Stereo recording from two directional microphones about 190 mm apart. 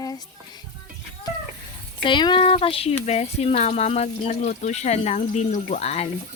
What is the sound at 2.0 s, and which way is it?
Speech, 25° left (ahead or behind).